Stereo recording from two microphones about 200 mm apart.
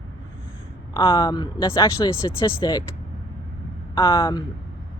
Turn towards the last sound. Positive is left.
turn(degrees=25)  # may be behind; listen again after turning